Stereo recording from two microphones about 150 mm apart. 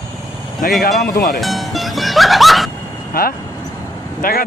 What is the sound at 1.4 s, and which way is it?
Music, centre (ahead or behind).